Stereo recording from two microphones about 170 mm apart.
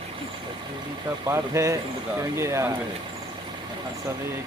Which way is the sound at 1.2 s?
15° right (ahead or behind).